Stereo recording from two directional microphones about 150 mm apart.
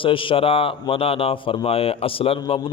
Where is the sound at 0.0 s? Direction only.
35° left (ahead or behind).